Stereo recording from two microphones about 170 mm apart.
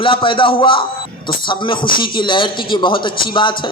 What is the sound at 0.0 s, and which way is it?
A man's voice, 30° left (ahead or behind).